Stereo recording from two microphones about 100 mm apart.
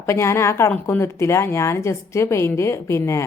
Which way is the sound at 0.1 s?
25° left (ahead or behind).